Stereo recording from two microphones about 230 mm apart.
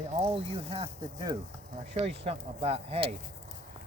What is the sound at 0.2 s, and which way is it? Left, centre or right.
Speech, right.